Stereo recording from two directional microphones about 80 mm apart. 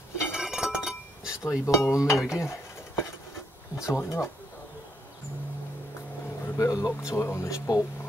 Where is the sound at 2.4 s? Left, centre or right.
Left.